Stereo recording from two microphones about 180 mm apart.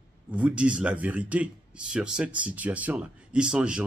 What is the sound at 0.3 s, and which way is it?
Speech, 5° right (ahead or behind).